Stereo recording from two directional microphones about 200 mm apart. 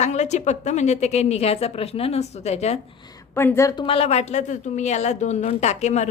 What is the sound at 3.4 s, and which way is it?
A woman's voice, 10° left (ahead or behind).